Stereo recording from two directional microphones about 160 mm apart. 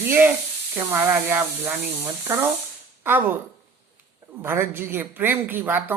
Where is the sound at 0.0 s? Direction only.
15° right (ahead or behind).